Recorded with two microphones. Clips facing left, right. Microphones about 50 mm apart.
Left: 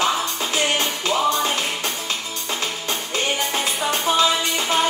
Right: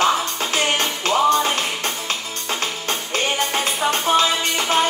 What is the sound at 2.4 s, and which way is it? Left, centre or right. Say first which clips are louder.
Music: right 2 dB; right.